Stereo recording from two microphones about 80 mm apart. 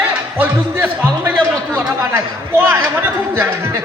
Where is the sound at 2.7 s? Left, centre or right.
Right.